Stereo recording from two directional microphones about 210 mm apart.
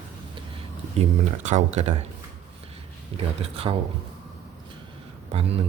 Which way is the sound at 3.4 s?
25° right (ahead or behind).